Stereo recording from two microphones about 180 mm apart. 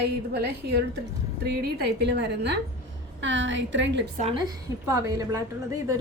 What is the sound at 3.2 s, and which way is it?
Speech, 90° right.